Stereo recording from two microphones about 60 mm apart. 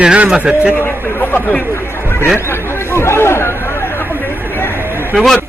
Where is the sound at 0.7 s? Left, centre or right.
Left.